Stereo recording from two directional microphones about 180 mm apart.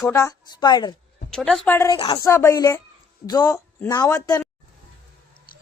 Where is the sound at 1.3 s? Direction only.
5° left (ahead or behind); by 4.4 s 20° left (ahead or behind).